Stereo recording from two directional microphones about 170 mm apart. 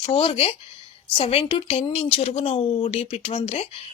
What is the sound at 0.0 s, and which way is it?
Speech, 30° left (ahead or behind).